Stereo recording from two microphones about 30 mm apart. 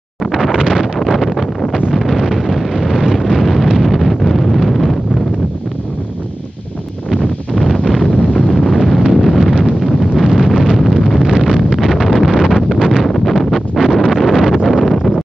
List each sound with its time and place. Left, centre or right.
0.2 s wind noise: centre
0.6 s wind noise: right
1.0 s a sound: centre
1.9 s wind noise: centre
7.1 s wind noise: centre
8.7 s wind noise: centre
11.2 s wind noise: centre
11.8 s wind noise: centre